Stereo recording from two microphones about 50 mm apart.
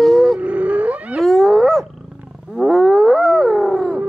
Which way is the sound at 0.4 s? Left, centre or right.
Right.